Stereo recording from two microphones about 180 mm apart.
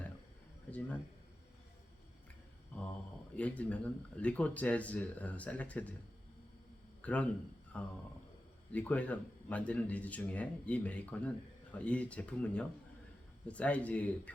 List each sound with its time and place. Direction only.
0.7 s speech: 10° left (ahead or behind)
2.7 s mantra: 10° left (ahead or behind)
3.3 s speech: 5° left (ahead or behind)
7.0 s a man's voice: 10° left (ahead or behind)